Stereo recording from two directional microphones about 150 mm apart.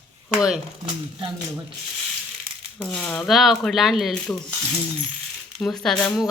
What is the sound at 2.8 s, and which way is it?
Speech, 10° left (ahead or behind).